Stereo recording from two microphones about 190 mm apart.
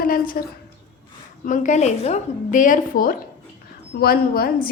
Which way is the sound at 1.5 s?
40° left (ahead or behind).